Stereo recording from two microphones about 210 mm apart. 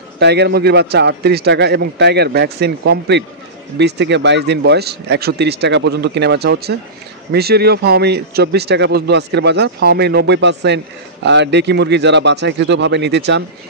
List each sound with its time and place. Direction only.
0.2 s a man's voice: 50° right (ahead or behind)